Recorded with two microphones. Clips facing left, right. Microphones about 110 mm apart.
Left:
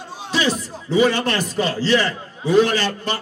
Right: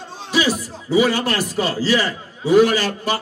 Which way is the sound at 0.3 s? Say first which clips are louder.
Right 2 dB; 10° right (ahead or behind).